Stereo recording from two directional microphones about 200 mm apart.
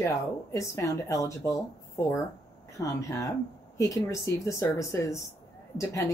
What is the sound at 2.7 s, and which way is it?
A woman's voice, 15° left (ahead or behind).